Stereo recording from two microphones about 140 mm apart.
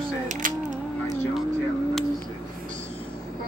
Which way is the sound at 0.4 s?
75° right (ahead or behind).